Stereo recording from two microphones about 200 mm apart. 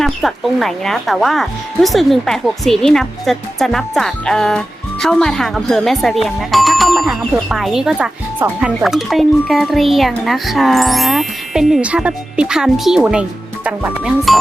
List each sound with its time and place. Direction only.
0.0 s speech: centre (ahead or behind)